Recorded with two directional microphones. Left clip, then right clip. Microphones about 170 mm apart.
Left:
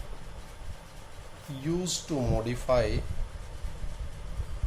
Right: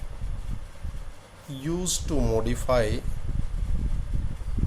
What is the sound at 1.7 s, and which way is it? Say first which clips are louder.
Speech: right 2 dB; 50° right (ahead or behind).